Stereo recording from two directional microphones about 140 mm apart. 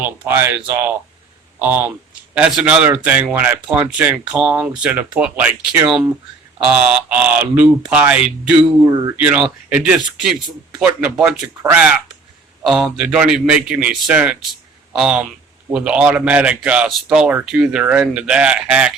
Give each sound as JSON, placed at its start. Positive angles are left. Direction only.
{"t": 0.0, "sound": "speech", "side_deg": -15}
{"t": 8.5, "sound": "speech", "side_deg": -30}
{"t": 9.1, "sound": "speech", "side_deg": -10}